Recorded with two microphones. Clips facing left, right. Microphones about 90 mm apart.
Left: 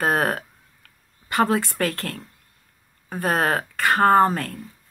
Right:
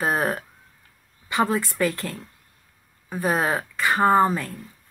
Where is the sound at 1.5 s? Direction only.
60° left (ahead or behind).